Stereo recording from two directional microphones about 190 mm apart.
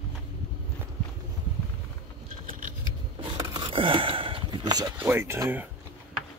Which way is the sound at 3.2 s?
25° right (ahead or behind).